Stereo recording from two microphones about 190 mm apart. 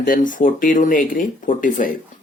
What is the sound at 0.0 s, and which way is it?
Speech, 45° left (ahead or behind).